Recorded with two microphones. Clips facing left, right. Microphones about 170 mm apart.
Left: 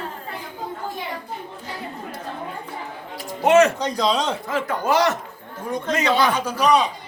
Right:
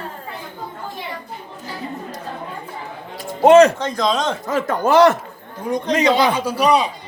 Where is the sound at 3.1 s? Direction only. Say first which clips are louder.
Right 6 dB; 40° right (ahead or behind).